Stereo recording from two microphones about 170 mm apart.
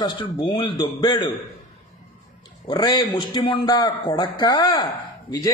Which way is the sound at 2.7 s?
25° left (ahead or behind).